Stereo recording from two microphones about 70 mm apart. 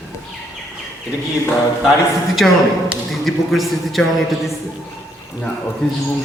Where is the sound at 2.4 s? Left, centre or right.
Centre.